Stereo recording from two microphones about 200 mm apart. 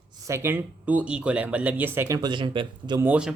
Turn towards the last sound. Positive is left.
turn(degrees=-5)  # may be behind; listen again after turning